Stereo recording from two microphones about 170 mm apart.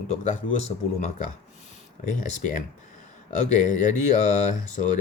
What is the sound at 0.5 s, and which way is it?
Speech, 40° left (ahead or behind).